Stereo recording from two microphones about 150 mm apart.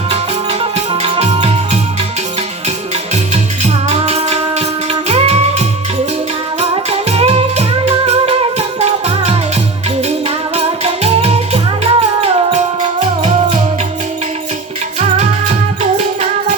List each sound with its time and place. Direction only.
0.9 s music: 45° right (ahead or behind)
3.6 s music: 45° right (ahead or behind)